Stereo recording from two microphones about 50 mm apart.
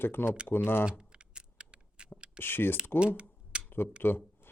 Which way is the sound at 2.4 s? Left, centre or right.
Left.